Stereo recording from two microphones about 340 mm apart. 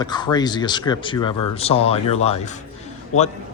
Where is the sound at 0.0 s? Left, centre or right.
Centre.